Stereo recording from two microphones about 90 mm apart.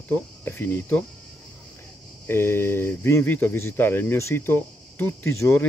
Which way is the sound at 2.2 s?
30° left (ahead or behind).